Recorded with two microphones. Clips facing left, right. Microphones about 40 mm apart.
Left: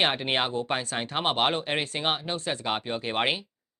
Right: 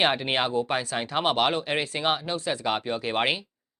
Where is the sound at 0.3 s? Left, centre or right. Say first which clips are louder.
Right 2 dB; centre.